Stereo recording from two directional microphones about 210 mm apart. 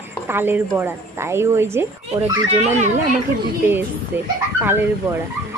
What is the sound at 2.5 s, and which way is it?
Speech, 35° right (ahead or behind).